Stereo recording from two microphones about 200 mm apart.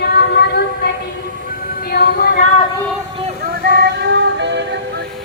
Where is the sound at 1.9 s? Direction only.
50° left (ahead or behind).